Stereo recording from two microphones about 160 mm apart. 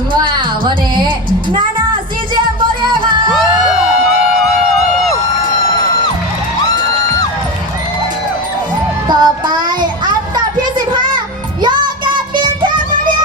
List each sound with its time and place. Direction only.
0.1 s a woman's voice: 30° right (ahead or behind)
2.8 s music: 30° right (ahead or behind)
9.0 s child singing: 25° right (ahead or behind)
10.3 s a sound: 25° right (ahead or behind)
11.6 s music: 30° right (ahead or behind)